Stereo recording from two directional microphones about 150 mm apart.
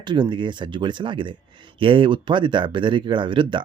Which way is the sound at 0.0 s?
30° right (ahead or behind).